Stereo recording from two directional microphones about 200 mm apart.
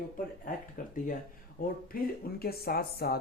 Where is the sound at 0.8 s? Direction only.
40° left (ahead or behind).